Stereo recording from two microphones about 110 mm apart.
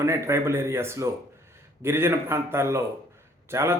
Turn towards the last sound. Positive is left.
turn(degrees=-25)  # may be behind; listen again after turning